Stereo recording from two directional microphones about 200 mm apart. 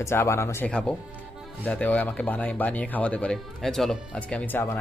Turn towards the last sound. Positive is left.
turn(degrees=10)  # may be behind; listen again after turning